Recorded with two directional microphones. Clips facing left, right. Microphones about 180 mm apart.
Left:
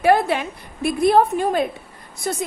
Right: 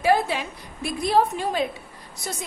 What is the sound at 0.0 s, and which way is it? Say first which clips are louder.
A woman's voice: left 4 dB; 60° left (ahead or behind).